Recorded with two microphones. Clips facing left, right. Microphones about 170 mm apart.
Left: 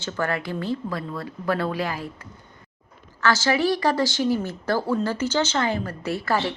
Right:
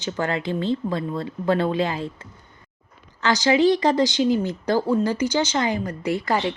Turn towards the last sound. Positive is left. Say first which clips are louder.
# right 2 dB
turn(degrees=-15)  # may be behind; listen again after turning